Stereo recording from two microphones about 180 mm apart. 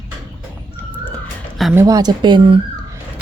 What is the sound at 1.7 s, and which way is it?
Speech, 20° right (ahead or behind).